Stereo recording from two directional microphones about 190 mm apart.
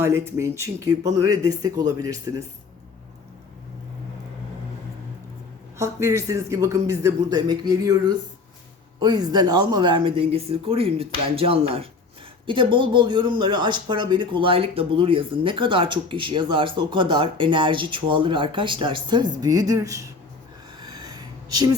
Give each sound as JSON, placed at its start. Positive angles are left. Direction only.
{"t": 0.0, "sound": "speech", "side_deg": -15}
{"t": 5.7, "sound": "speech", "side_deg": -15}
{"t": 20.7, "sound": "a sound", "side_deg": -20}